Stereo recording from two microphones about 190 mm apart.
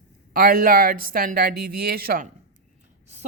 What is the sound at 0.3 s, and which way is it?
Speech, 50° right (ahead or behind).